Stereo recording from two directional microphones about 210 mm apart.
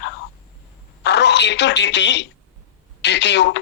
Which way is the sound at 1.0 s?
55° left (ahead or behind).